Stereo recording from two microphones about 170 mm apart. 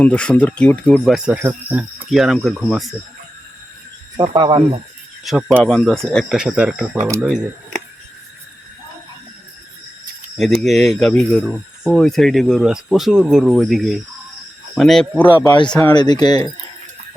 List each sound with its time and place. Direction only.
0.0 s speech: 5° left (ahead or behind)
1.0 s speech: 5° right (ahead or behind)
4.4 s speech: 30° right (ahead or behind)
5.2 s speech: centre (ahead or behind)
10.3 s speech: centre (ahead or behind)
15.9 s speech: 25° left (ahead or behind)